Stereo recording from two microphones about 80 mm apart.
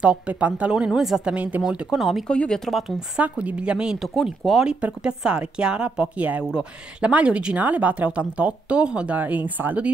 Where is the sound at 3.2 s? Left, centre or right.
Centre.